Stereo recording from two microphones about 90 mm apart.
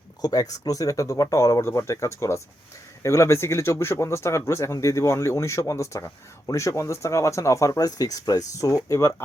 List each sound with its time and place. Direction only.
0.2 s speech: 45° left (ahead or behind)